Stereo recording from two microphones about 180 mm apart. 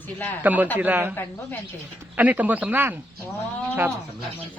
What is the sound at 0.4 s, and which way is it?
Speech, 10° right (ahead or behind).